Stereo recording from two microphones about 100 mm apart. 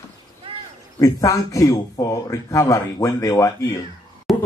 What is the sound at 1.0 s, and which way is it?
Speech, 35° left (ahead or behind).